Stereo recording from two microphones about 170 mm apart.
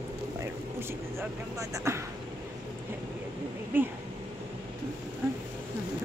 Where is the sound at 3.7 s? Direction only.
10° right (ahead or behind).